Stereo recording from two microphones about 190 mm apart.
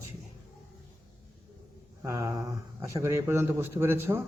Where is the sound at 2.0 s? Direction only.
15° right (ahead or behind).